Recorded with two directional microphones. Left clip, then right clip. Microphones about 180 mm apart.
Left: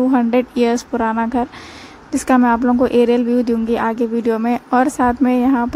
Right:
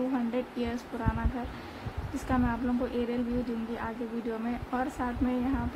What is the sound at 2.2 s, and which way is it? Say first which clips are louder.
A woman's voice: left 17 dB; 40° left (ahead or behind).